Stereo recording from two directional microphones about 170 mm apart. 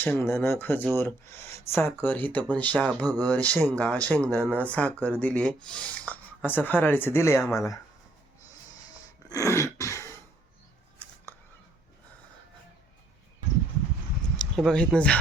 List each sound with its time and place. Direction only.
0.0 s speech: 10° left (ahead or behind)
3.0 s speech: 20° right (ahead or behind)
3.3 s speech: 10° left (ahead or behind)
9.3 s throat clearing: 15° left (ahead or behind)
11.0 s a sound: 10° left (ahead or behind)
14.3 s speech: centre (ahead or behind)